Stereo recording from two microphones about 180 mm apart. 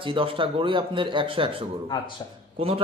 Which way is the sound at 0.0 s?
30° right (ahead or behind).